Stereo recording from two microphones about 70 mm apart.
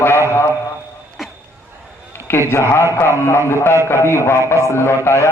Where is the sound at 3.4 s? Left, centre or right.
Left.